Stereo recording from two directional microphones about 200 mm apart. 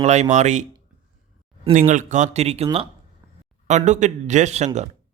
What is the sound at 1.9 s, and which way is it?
Speech, 40° right (ahead or behind).